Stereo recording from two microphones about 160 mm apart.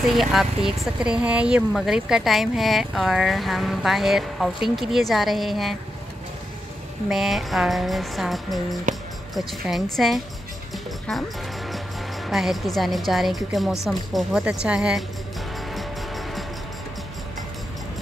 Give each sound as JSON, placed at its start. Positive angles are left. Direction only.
{"t": 0.0, "sound": "speech", "side_deg": 0}
{"t": 7.1, "sound": "speech", "side_deg": 0}
{"t": 8.9, "sound": "speech", "side_deg": -50}
{"t": 9.5, "sound": "speech", "side_deg": 0}
{"t": 15.7, "sound": "music", "side_deg": 0}